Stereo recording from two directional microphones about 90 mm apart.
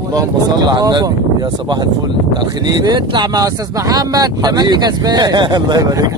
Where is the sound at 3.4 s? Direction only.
40° right (ahead or behind).